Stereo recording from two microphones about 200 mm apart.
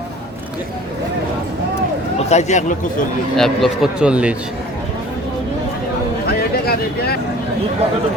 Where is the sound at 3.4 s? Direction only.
Centre (ahead or behind).